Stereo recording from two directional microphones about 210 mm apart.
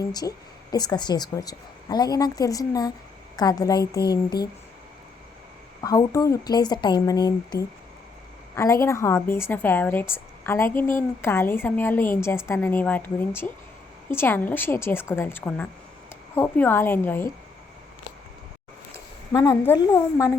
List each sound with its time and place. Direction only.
0.0 s speech: 15° left (ahead or behind)
5.8 s speech: 15° left (ahead or behind)
19.3 s speech: 15° left (ahead or behind)